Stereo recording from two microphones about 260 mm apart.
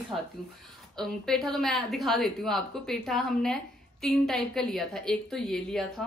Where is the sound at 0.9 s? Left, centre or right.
Centre.